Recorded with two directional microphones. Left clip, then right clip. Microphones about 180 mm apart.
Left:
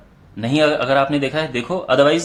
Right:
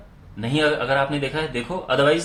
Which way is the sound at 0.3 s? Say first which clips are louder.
Left 4 dB; 35° left (ahead or behind).